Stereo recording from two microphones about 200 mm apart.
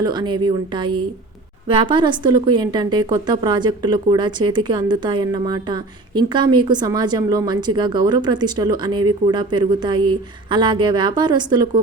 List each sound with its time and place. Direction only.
0.0 s speech: 20° right (ahead or behind)